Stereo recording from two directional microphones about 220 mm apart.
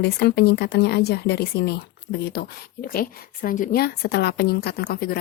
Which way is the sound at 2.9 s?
40° left (ahead or behind).